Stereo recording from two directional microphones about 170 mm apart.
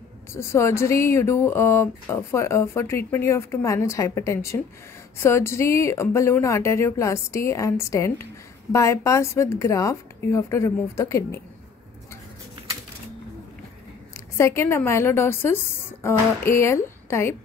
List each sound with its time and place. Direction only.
0.3 s speech: 15° left (ahead or behind)
14.1 s speech: 15° left (ahead or behind)